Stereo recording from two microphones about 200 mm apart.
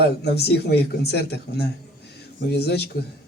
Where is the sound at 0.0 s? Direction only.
55° left (ahead or behind).